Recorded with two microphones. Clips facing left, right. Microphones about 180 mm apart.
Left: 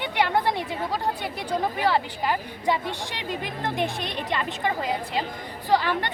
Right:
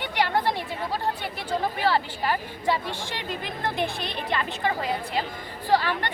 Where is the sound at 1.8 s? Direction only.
15° left (ahead or behind).